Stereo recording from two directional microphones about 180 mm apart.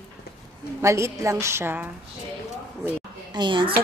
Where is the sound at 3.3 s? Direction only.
25° right (ahead or behind).